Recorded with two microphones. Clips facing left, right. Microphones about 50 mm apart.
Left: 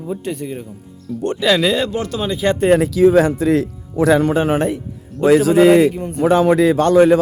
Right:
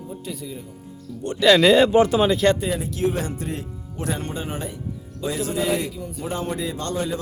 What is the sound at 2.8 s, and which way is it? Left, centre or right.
A man's voice, left.